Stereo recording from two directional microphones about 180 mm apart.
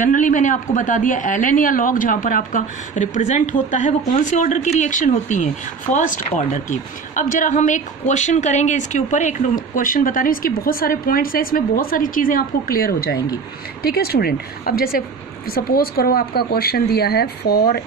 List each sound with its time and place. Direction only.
0.0 s a woman's voice: 45° left (ahead or behind); by 17.8 s 60° left (ahead or behind)